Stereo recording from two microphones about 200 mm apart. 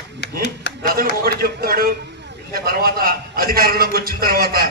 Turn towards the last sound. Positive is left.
turn(degrees=-50)  # may be behind; listen again after turning